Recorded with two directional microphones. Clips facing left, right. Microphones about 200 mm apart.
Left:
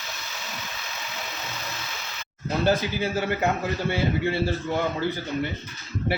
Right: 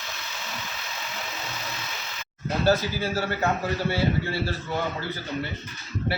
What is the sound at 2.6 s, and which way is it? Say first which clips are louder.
Speech: right 1 dB; 20° left (ahead or behind).